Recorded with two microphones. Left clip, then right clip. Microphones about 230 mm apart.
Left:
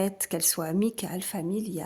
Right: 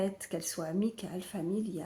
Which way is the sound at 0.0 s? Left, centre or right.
Left.